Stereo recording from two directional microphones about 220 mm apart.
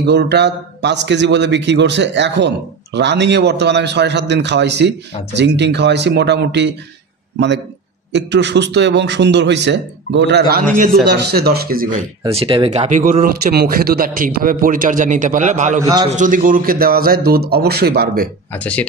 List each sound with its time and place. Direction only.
0.0 s a man's voice: 50° right (ahead or behind)
12.2 s speech: 25° right (ahead or behind)
15.8 s a man's voice: 15° right (ahead or behind)
16.1 s a man's voice: 35° right (ahead or behind)
18.5 s speech: 5° left (ahead or behind)